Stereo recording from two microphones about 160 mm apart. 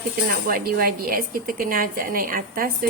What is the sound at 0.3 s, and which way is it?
Speech, 65° right (ahead or behind).